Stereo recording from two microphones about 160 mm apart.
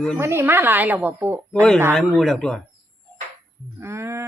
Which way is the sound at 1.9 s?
Centre (ahead or behind).